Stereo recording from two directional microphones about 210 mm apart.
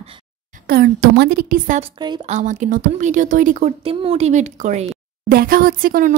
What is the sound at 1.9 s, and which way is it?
Speech, 20° right (ahead or behind).